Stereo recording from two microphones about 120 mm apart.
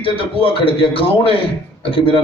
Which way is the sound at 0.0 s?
50° left (ahead or behind).